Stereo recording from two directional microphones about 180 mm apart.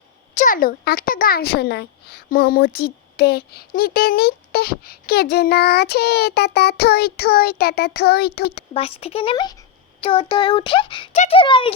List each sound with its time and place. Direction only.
0.3 s a child's voice: 45° left (ahead or behind)
8.7 s a child's voice: 30° left (ahead or behind)